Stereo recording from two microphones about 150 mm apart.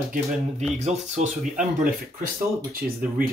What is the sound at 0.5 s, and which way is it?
Speech, 50° right (ahead or behind).